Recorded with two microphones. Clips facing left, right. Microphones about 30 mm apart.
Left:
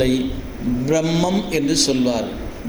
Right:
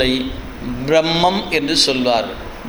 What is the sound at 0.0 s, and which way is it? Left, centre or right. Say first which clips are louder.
A man's voice: right 1 dB; right.